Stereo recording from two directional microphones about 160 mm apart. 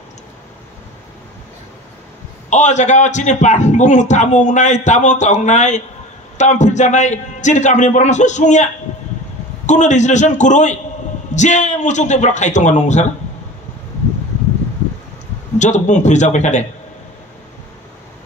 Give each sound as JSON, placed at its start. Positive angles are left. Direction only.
{"t": 2.5, "sound": "a man's voice", "side_deg": 50}
{"t": 9.7, "sound": "a man's voice", "side_deg": 50}
{"t": 15.6, "sound": "a man's voice", "side_deg": 50}